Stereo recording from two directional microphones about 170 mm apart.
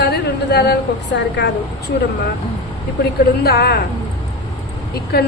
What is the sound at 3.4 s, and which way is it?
Speech, 65° left (ahead or behind).